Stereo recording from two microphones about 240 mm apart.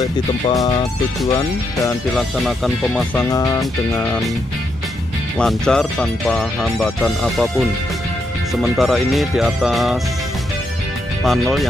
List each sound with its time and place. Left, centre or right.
0.0 s speech: centre
2.1 s speech: centre
5.4 s speech: centre
8.7 s speech: centre
11.2 s speech: centre